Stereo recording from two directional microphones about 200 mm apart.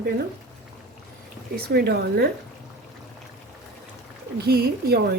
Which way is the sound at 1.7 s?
55° right (ahead or behind).